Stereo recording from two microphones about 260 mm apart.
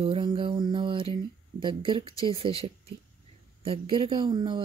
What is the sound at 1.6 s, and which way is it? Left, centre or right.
Speech, centre.